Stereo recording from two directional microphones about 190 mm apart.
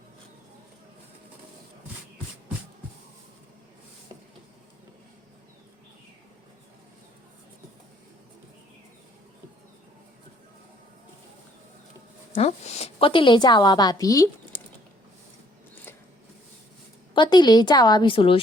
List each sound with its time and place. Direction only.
12.3 s a woman's voice: 35° left (ahead or behind); by 14.6 s 15° left (ahead or behind)
15.7 s a sound: 10° left (ahead or behind)
17.2 s a woman's voice: 25° left (ahead or behind)